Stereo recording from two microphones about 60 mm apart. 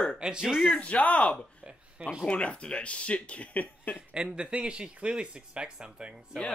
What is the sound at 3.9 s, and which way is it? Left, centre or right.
Speech, centre.